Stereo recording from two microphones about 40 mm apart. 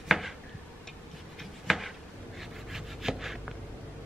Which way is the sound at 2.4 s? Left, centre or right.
Centre.